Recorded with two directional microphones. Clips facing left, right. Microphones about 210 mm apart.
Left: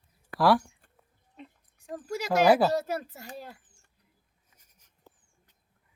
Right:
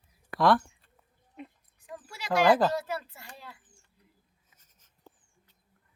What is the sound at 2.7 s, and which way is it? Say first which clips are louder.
Speech: left 4 dB; 40° left (ahead or behind).